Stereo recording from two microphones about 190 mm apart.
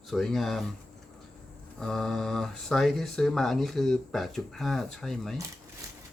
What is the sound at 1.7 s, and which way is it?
Speech, 5° left (ahead or behind).